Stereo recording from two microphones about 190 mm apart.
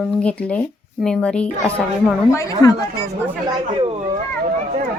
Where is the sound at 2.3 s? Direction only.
15° left (ahead or behind).